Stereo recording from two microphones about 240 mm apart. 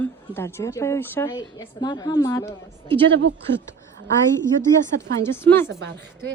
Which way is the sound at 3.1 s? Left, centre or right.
Right.